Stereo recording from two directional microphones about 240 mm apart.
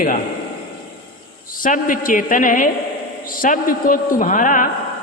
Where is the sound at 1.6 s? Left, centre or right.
Left.